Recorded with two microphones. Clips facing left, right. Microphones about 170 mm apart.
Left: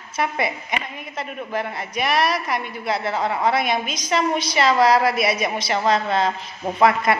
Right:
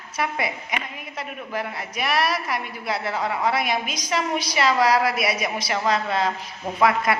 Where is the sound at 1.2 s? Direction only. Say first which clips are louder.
Left 3 dB; 5° right (ahead or behind).